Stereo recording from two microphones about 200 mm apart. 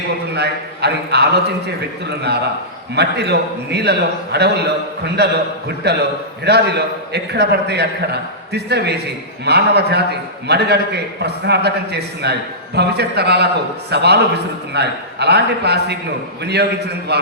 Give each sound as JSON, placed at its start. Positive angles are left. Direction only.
{"t": 0.3, "sound": "a man's voice", "side_deg": -55}